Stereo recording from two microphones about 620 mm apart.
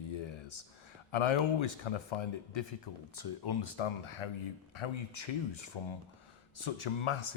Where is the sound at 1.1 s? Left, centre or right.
Left.